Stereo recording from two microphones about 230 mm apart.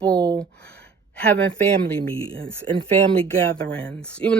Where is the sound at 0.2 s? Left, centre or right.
Centre.